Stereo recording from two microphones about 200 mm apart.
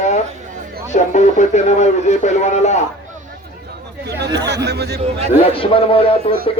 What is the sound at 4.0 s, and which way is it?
Speech, 55° right (ahead or behind).